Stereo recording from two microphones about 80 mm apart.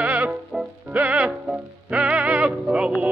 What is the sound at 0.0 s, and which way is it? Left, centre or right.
Music, centre.